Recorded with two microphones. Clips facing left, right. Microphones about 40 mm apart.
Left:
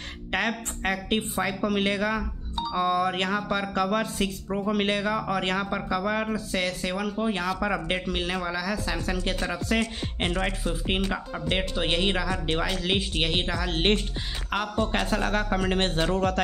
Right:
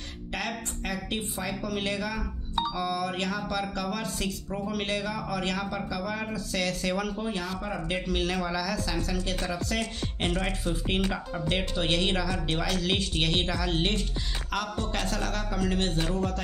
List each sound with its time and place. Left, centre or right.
0.3 s speech: left
6.5 s speech: left
8.8 s speech: left; by 13.7 s centre
13.7 s speech: left
14.1 s speech: left
16.1 s a man's voice: left